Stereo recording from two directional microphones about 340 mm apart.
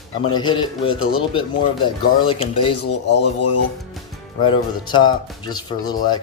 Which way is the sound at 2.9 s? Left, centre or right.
Left.